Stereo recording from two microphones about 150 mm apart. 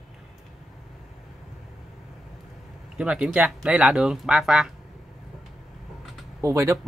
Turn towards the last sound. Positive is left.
turn(degrees=-20)  # may be behind; listen again after turning